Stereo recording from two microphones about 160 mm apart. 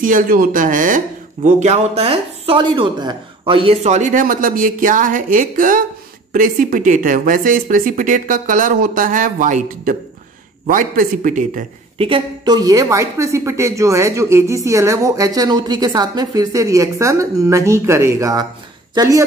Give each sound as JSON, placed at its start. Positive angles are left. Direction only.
{"t": 0.0, "sound": "speech", "side_deg": -55}
{"t": 12.0, "sound": "a woman's voice", "side_deg": -30}